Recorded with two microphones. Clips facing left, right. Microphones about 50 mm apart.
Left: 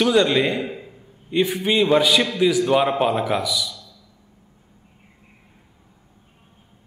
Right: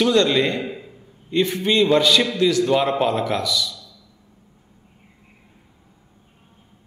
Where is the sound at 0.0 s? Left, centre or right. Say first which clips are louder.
Even; centre.